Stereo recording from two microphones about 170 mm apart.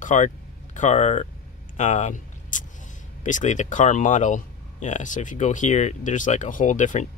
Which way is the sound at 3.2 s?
45° left (ahead or behind).